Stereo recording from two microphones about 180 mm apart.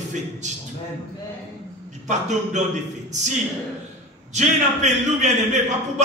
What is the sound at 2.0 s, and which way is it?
Speech, 40° right (ahead or behind).